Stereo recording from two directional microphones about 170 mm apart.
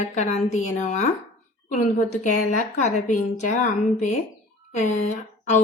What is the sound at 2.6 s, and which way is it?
A woman's voice, 45° left (ahead or behind).